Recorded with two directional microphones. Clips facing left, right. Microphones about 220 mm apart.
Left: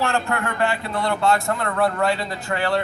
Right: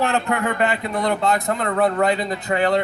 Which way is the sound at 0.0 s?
20° right (ahead or behind).